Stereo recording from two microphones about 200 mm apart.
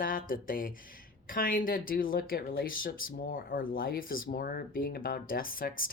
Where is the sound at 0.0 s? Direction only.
45° left (ahead or behind).